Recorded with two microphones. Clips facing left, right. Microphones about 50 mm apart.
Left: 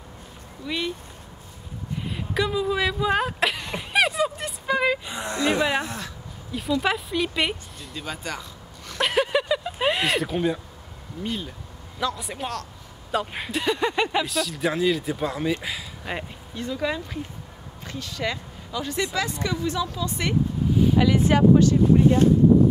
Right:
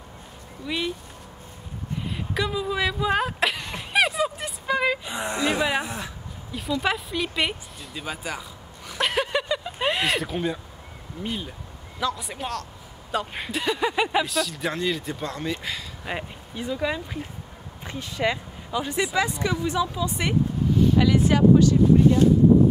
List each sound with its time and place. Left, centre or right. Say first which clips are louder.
0.7 s speech: even; centre
2.0 s a sound: left 2 dB; centre
5.1 s speech: right 2 dB; centre
5.4 s speech: left 2 dB; centre
11.2 s speech: left 1 dB; centre
17.8 s speech: right 3 dB; right
20.7 s a sound: even; centre
21.2 s speech: even; left